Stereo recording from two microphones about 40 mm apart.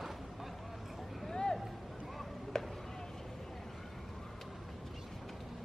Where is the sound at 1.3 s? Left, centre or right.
Centre.